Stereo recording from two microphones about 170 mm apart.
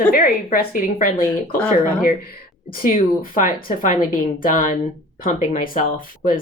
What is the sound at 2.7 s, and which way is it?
Speech, 55° left (ahead or behind).